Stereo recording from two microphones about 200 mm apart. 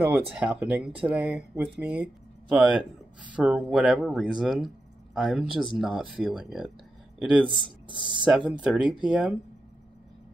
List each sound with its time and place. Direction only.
0.0 s speech: 10° right (ahead or behind)
7.4 s speech: 25° right (ahead or behind)
8.5 s speech: 5° right (ahead or behind)